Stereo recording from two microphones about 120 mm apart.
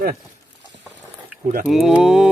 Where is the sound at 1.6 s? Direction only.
5° right (ahead or behind).